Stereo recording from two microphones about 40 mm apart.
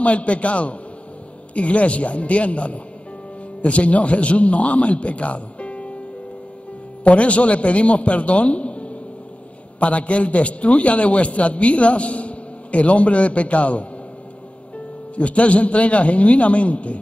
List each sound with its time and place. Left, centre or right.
0.0 s a man's voice: left
7.1 s a man's voice: left
15.1 s a man's voice: left